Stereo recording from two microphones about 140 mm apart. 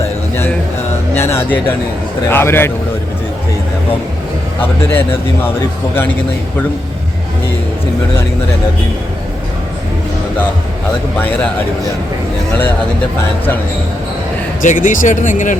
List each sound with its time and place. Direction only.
1.1 s a man's voice: 15° left (ahead or behind)
14.6 s speech: 70° left (ahead or behind)